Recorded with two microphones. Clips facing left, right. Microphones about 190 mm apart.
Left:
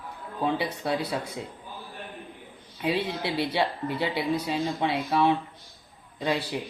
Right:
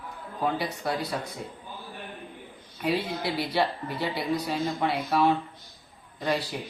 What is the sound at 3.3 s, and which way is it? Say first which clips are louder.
Speech: even; 25° left (ahead or behind).